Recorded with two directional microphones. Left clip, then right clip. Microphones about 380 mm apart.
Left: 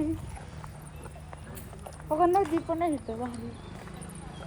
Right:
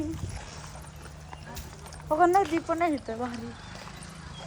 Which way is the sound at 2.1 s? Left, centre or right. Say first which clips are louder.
Right 2 dB; right.